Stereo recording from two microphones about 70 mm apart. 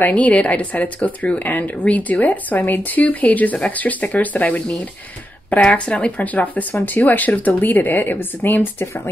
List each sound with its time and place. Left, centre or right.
0.1 s speech: centre